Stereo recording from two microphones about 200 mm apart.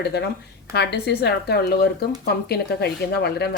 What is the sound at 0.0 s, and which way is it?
A woman's voice, 55° left (ahead or behind).